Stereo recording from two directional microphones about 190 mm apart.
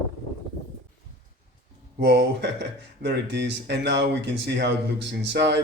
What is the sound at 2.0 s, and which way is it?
Speech, 65° right (ahead or behind).